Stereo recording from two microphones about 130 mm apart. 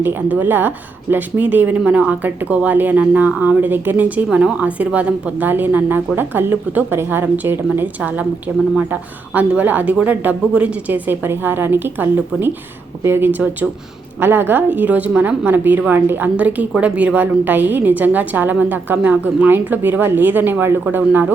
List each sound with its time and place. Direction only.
0.0 s a woman's voice: 15° right (ahead or behind)